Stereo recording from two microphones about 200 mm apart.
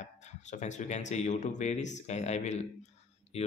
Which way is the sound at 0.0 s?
35° left (ahead or behind).